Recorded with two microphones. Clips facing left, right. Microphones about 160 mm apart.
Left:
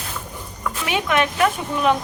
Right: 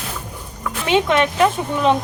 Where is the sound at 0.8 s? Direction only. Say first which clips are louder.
Right 5 dB; 25° right (ahead or behind).